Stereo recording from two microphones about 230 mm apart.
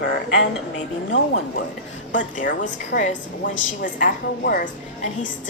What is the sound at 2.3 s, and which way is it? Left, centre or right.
Speech, left.